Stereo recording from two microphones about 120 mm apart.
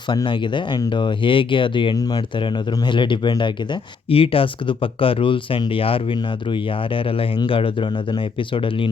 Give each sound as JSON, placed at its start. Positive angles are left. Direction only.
{"t": 0.1, "sound": "speech", "side_deg": 40}
{"t": 2.0, "sound": "speech", "side_deg": 35}